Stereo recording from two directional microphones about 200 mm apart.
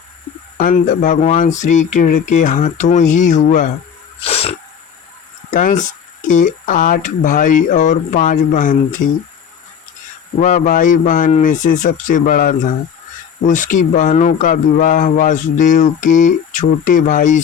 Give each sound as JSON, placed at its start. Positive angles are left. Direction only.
{"t": 0.6, "sound": "speech", "side_deg": 40}
{"t": 4.2, "sound": "sneeze", "side_deg": 30}
{"t": 5.5, "sound": "speech", "side_deg": 40}
{"t": 10.4, "sound": "speech", "side_deg": 40}